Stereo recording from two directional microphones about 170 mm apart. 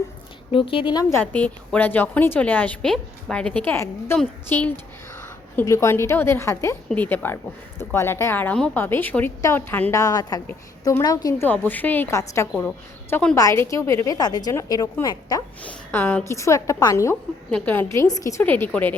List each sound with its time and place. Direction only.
0.5 s speech: 30° left (ahead or behind)
1.1 s a woman's voice: 10° left (ahead or behind)
11.4 s a woman's voice: 10° left (ahead or behind)
15.6 s a woman's voice: 10° left (ahead or behind)